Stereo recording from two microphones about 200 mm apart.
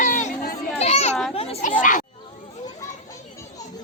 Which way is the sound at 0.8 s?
30° left (ahead or behind).